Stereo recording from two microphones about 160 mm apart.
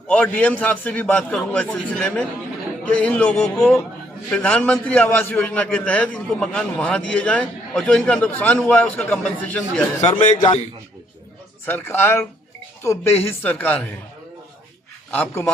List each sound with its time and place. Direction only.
0.1 s a man's voice: 10° left (ahead or behind)
10.0 s a man's voice: 25° left (ahead or behind)
11.6 s a man's voice: 15° left (ahead or behind)
15.1 s a man's voice: 15° left (ahead or behind)